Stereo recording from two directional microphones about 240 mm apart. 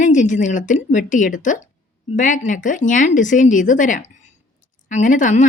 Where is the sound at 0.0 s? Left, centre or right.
Left.